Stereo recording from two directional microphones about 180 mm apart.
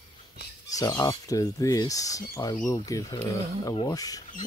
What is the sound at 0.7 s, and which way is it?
Speech, 20° left (ahead or behind).